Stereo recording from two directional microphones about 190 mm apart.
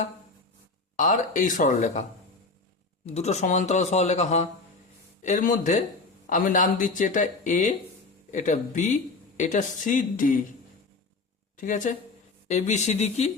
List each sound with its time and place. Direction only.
0.9 s speech: 40° left (ahead or behind)
3.2 s speech: 35° left (ahead or behind)
11.5 s speech: 45° left (ahead or behind)